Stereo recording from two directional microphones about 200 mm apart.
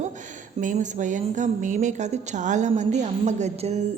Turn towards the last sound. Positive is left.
turn(degrees=-35)  # may be behind; listen again after turning